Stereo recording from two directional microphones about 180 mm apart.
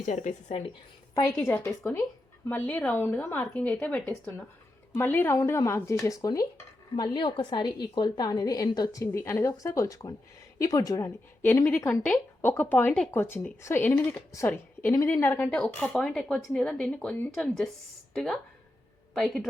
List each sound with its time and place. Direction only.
0.0 s speech: 40° left (ahead or behind)
1.4 s a woman's voice: 10° left (ahead or behind)